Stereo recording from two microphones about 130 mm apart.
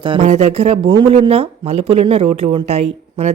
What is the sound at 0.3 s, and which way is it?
Speech, 55° right (ahead or behind).